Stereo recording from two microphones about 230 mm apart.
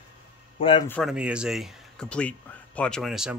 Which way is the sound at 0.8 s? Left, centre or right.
Centre.